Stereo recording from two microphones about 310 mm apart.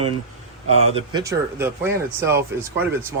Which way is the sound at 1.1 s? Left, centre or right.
Centre.